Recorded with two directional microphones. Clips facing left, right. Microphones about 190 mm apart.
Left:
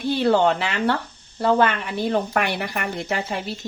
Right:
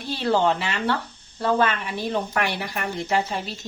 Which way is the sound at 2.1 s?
60° left (ahead or behind).